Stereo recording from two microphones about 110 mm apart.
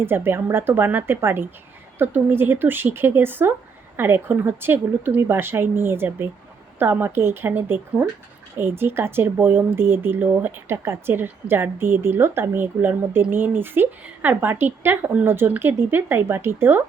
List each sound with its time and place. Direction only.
0.0 s speech: 20° right (ahead or behind)